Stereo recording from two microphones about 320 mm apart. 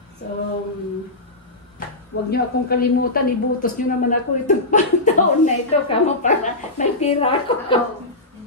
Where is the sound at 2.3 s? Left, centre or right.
Left.